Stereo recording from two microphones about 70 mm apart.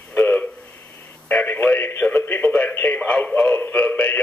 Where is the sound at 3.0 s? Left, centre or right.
Centre.